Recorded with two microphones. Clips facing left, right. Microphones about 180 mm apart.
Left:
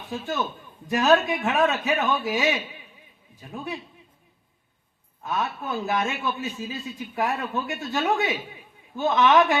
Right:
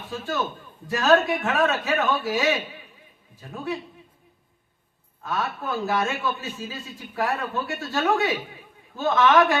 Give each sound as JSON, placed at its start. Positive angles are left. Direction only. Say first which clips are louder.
{"t": 0.1, "sound": "a man's voice", "louder": "even", "side_deg": 20}
{"t": 5.2, "sound": "a man's voice", "louder": "even", "side_deg": 20}